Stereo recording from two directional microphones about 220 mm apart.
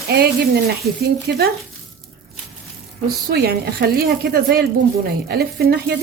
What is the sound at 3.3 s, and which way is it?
A woman's voice, 45° right (ahead or behind).